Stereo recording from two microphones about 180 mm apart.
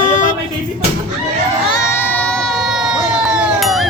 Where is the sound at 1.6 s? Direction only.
20° left (ahead or behind); by 2.9 s centre (ahead or behind).